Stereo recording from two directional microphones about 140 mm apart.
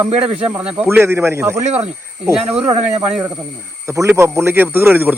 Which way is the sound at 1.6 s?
50° right (ahead or behind).